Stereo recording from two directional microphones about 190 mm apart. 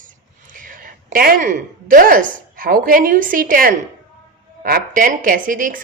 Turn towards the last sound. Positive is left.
turn(degrees=-45)  # may be behind; listen again after turning